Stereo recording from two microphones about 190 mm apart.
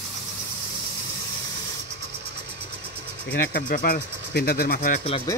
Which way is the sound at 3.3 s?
50° left (ahead or behind).